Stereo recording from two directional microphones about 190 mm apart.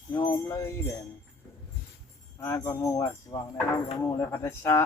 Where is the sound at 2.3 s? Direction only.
15° left (ahead or behind).